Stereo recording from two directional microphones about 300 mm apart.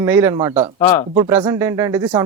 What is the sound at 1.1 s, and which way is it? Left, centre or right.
Speech, centre.